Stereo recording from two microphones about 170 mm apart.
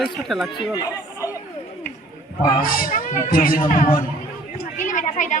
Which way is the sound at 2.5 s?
55° left (ahead or behind).